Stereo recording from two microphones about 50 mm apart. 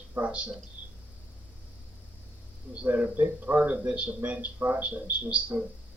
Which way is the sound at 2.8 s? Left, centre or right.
Right.